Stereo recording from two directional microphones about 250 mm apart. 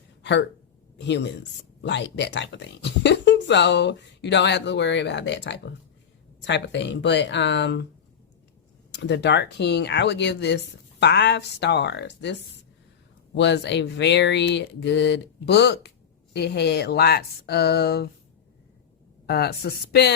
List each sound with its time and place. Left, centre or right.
0.2 s a sound: left
0.9 s speech: left
8.9 s speech: left
19.2 s speech: left